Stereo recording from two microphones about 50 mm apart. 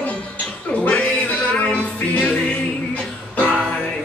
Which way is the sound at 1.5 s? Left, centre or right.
Left.